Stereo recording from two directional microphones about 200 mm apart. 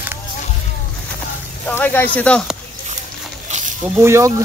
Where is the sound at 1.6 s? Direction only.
10° left (ahead or behind).